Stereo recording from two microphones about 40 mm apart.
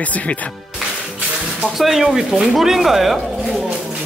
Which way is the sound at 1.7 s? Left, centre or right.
Centre.